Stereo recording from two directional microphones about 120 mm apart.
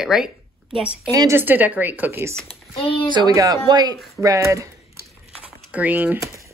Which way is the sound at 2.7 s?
45° left (ahead or behind).